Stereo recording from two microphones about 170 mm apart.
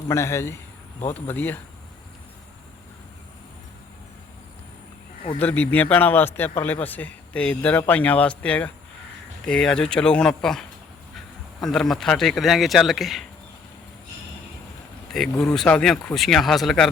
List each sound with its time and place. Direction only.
0.1 s speech: 15° left (ahead or behind)
5.4 s speech: 10° left (ahead or behind)
15.1 s speech: centre (ahead or behind)